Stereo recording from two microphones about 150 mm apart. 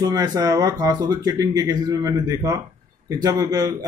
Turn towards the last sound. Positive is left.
turn(degrees=-25)  # may be behind; listen again after turning